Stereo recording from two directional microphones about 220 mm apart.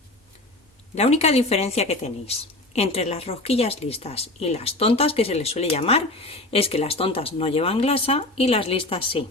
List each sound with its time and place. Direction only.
0.9 s a woman's voice: 30° left (ahead or behind)